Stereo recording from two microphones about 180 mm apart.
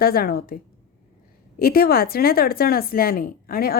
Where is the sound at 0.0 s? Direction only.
55° left (ahead or behind).